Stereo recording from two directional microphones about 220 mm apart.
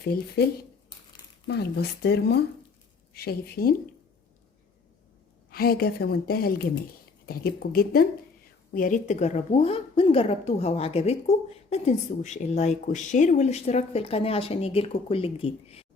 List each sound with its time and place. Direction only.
0.0 s a woman's voice: 45° left (ahead or behind)
1.5 s a woman's voice: 50° left (ahead or behind)
5.5 s a woman's voice: 45° left (ahead or behind); by 15.9 s 25° left (ahead or behind)